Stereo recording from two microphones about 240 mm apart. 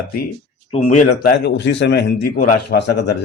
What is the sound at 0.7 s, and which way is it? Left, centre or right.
A man's voice, left.